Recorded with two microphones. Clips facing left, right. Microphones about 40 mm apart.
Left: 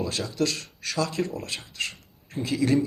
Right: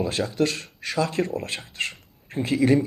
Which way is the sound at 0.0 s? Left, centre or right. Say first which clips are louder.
Right 3 dB; right.